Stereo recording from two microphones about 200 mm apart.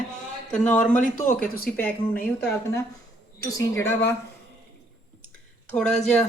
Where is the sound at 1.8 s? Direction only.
10° left (ahead or behind).